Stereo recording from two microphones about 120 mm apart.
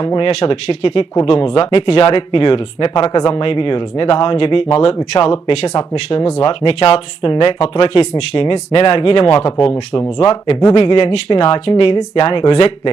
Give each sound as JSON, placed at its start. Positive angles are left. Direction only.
{"t": 1.2, "sound": "speech", "side_deg": 50}
{"t": 6.4, "sound": "speech", "side_deg": 50}
{"t": 10.8, "sound": "speech", "side_deg": 50}